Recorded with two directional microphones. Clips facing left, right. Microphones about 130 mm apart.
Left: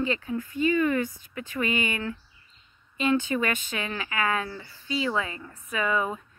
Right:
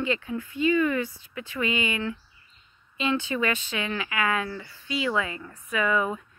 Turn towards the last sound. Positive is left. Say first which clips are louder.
# right 2 dB
turn(degrees=30)  # may be behind; listen again after turning